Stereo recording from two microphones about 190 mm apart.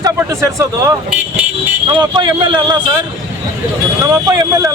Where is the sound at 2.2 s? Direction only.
25° right (ahead or behind).